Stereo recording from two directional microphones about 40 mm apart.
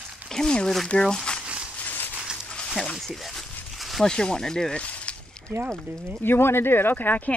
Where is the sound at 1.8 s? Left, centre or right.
Left.